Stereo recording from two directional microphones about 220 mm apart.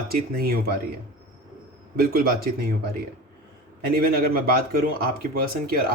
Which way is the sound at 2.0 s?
45° right (ahead or behind).